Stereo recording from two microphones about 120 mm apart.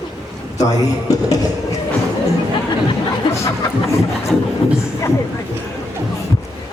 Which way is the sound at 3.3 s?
25° left (ahead or behind).